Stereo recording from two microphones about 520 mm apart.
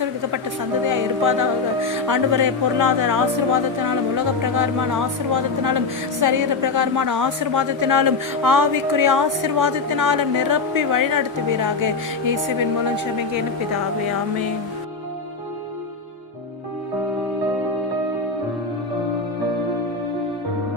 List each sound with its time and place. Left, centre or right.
0.9 s music: right
2.0 s a woman's voice: right